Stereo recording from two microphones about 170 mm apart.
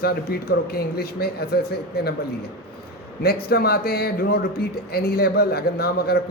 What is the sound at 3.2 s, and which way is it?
A man's voice, 65° left (ahead or behind).